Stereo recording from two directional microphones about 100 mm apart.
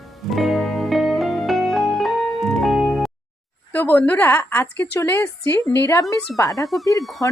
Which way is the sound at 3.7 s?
20° left (ahead or behind).